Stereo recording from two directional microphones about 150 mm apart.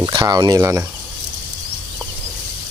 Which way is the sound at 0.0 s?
25° right (ahead or behind).